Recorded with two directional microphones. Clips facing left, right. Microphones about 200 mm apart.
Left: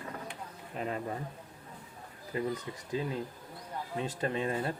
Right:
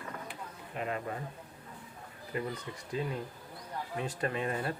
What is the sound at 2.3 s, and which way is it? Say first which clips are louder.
Speech: left 2 dB; 30° left (ahead or behind).